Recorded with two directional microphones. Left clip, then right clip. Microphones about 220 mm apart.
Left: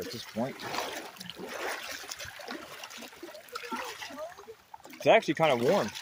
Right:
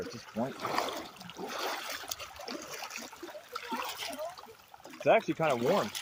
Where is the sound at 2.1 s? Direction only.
5° right (ahead or behind).